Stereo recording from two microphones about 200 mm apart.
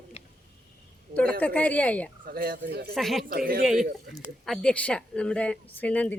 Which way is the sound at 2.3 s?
50° right (ahead or behind).